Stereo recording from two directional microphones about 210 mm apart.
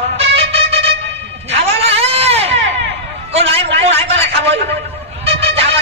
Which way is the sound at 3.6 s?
55° right (ahead or behind).